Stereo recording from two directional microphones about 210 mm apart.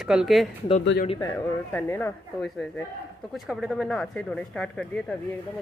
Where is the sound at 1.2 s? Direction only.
15° left (ahead or behind).